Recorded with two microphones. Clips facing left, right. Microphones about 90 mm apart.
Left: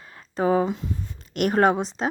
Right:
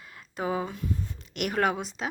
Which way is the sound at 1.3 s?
40° left (ahead or behind).